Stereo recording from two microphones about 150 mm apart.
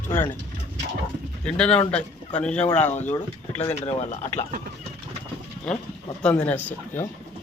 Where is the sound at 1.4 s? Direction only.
5° left (ahead or behind).